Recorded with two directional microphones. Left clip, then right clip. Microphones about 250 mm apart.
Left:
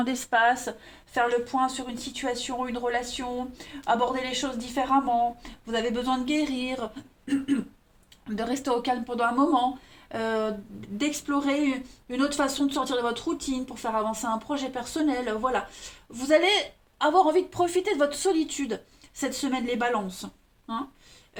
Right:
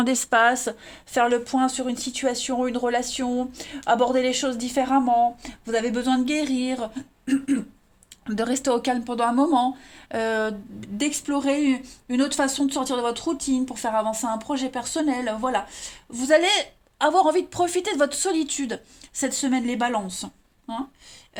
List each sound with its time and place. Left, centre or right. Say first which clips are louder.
0.0 s a woman's voice: right 4 dB; right
8.4 s a woman's voice: right 4 dB; right